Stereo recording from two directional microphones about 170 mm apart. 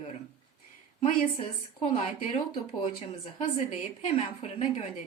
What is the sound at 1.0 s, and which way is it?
A woman's voice, 35° left (ahead or behind).